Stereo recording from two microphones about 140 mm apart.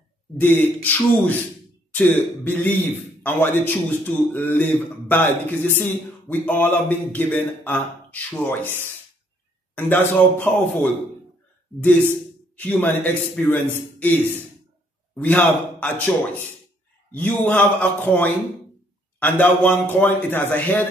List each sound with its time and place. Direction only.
0.4 s a man's voice: 15° left (ahead or behind)
9.8 s a man's voice: 15° left (ahead or behind)
12.5 s a man's voice: 10° left (ahead or behind)
15.2 s a man's voice: 10° left (ahead or behind)
17.1 s a man's voice: 10° left (ahead or behind)